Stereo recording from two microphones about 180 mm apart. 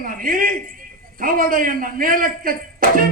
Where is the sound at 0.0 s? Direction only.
50° right (ahead or behind).